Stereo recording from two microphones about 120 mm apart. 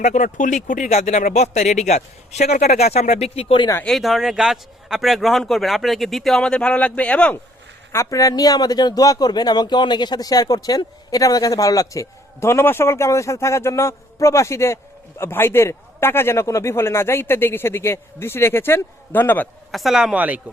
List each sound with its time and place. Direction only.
0.0 s speech: 90° left; by 3.7 s 50° left (ahead or behind)
3.8 s a man's voice: centre (ahead or behind)
7.9 s speech: 30° left (ahead or behind)
19.7 s a man's voice: centre (ahead or behind)
20.1 s speech: 15° right (ahead or behind)